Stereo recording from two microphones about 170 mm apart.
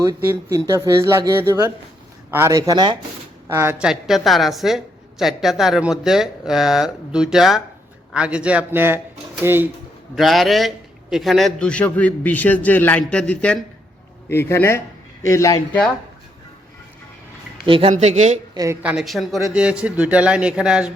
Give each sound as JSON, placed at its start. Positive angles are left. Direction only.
{"t": 0.0, "sound": "speech", "side_deg": -20}
{"t": 3.5, "sound": "speech", "side_deg": -15}
{"t": 10.2, "sound": "a man's voice", "side_deg": 0}
{"t": 17.7, "sound": "speech", "side_deg": -30}
{"t": 17.9, "sound": "speech", "side_deg": -45}
{"t": 18.5, "sound": "a woman's voice", "side_deg": -20}
{"t": 18.8, "sound": "speech", "side_deg": -5}